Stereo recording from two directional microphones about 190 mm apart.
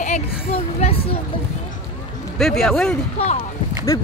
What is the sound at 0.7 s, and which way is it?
Speech, 30° left (ahead or behind).